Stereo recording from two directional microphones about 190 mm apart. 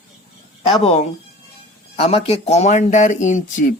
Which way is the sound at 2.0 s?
30° left (ahead or behind).